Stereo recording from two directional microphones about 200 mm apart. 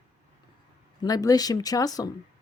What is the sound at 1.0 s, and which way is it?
Speech, 20° left (ahead or behind).